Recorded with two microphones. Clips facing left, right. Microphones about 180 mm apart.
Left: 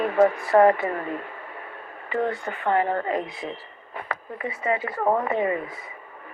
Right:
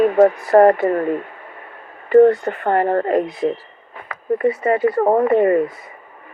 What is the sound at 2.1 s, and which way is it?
Speech, 40° right (ahead or behind).